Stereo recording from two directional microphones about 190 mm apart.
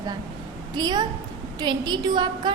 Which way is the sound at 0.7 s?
20° right (ahead or behind).